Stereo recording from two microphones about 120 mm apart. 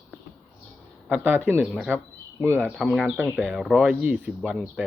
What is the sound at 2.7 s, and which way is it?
Speech, 5° right (ahead or behind).